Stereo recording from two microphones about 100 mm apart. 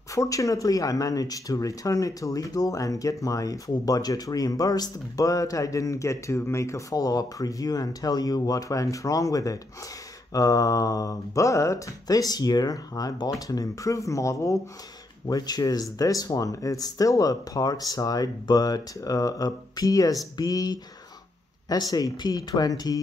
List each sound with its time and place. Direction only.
0.1 s speech: 35° left (ahead or behind)